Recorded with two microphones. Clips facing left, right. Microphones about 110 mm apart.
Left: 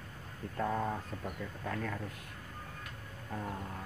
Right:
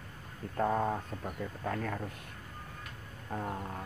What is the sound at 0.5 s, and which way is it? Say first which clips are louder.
Speech: right 4 dB; 35° right (ahead or behind).